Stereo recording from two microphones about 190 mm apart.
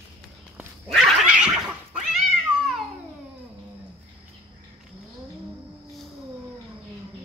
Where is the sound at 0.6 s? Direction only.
Centre (ahead or behind).